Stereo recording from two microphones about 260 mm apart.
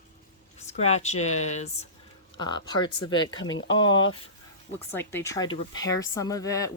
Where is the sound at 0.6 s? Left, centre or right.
Left.